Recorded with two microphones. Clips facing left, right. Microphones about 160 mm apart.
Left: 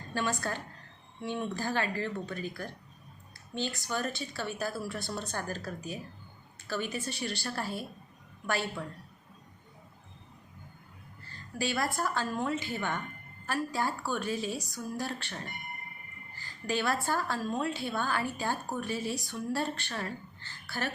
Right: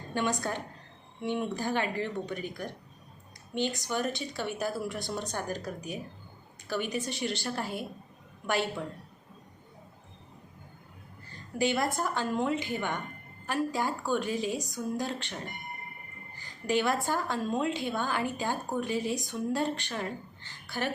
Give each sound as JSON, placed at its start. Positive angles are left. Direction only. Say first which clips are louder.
{"t": 0.1, "sound": "a woman's voice", "louder": "right 2 dB", "side_deg": -20}
{"t": 11.5, "sound": "a woman's voice", "louder": "right 4 dB", "side_deg": -20}